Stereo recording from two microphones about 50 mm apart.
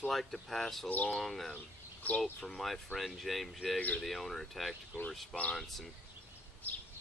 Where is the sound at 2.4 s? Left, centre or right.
Centre.